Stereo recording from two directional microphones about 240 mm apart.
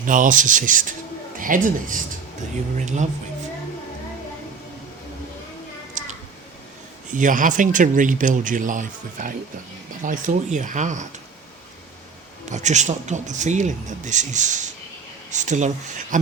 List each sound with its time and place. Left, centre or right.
0.0 s speech: right
7.1 s speech: right
12.5 s speech: right